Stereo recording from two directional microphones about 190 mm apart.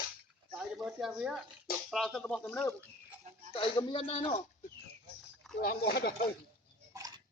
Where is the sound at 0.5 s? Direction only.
Centre (ahead or behind).